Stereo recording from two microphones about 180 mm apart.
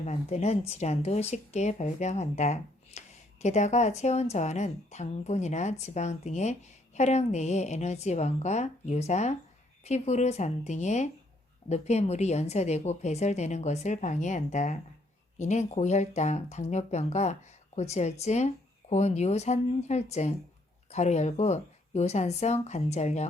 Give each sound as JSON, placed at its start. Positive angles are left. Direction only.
{"t": 0.0, "sound": "a woman's voice", "side_deg": 40}